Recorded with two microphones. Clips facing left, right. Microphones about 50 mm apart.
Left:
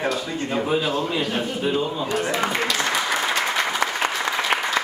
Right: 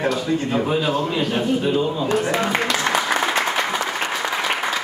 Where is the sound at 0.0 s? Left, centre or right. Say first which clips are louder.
Right 4 dB; centre.